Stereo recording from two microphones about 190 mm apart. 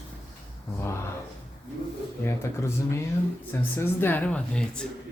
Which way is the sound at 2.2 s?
15° left (ahead or behind).